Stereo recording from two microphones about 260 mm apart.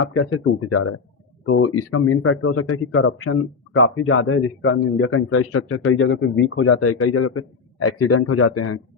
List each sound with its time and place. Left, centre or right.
0.0 s a man's voice: left